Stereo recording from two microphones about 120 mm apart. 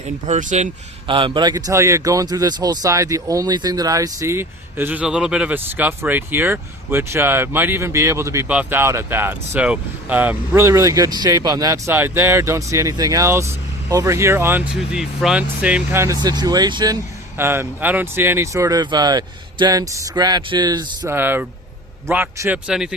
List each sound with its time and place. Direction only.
0.3 s speech: 75° right (ahead or behind)
1.0 s speech: 45° right (ahead or behind); by 16.0 s 10° right (ahead or behind)
16.0 s speech: 30° right (ahead or behind)
17.3 s speech: 20° right (ahead or behind); by 21.1 s 35° right (ahead or behind)
21.1 s a man's voice: 15° right (ahead or behind)